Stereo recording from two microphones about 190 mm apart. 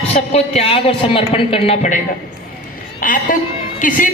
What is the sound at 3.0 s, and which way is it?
Speech, 45° left (ahead or behind).